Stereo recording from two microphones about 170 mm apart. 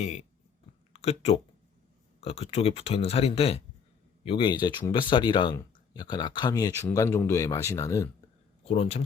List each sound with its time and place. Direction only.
0.9 s speech: 40° left (ahead or behind); by 8.0 s 20° left (ahead or behind)
8.6 s speech: 35° left (ahead or behind)